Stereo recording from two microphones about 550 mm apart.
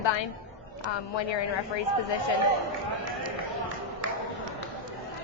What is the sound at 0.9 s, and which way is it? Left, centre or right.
Speech, left.